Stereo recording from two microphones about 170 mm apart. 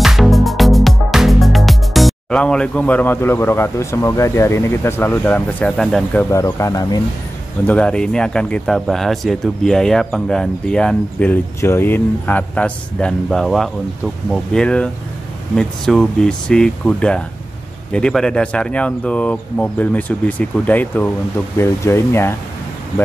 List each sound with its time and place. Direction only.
0.0 s music: centre (ahead or behind)
6.3 s speech: 20° left (ahead or behind)
7.6 s speech: 5° left (ahead or behind)